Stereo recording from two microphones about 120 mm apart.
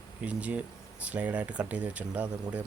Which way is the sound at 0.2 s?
10° right (ahead or behind).